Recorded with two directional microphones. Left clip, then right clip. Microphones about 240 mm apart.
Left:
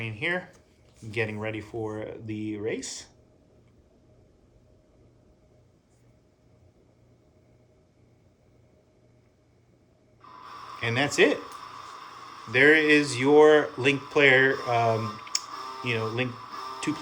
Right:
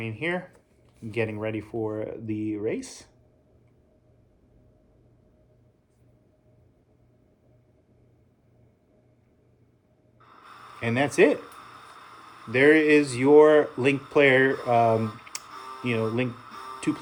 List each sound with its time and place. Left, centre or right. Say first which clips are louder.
0.0 s speech: even; centre
10.8 s speech: right 1 dB; centre
12.5 s speech: even; centre